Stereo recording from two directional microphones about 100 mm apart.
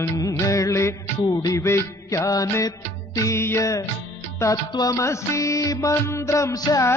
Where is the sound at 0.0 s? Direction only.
30° left (ahead or behind).